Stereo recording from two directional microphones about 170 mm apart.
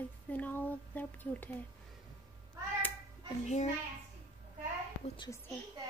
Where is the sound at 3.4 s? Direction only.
40° left (ahead or behind).